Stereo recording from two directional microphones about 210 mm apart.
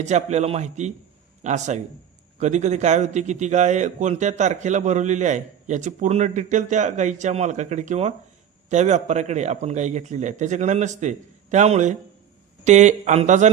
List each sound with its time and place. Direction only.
0.0 s a man's voice: 35° right (ahead or behind)